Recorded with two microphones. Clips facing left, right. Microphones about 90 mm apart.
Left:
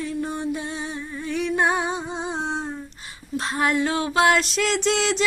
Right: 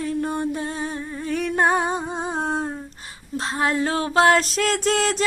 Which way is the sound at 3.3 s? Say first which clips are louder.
Even; 30° right (ahead or behind).